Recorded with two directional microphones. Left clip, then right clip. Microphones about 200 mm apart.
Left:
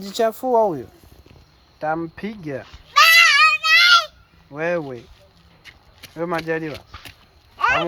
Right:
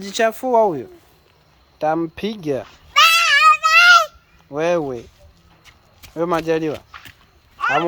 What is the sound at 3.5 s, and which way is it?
Child singing, 15° right (ahead or behind).